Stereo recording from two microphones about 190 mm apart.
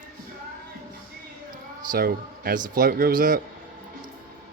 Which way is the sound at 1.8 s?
50° right (ahead or behind).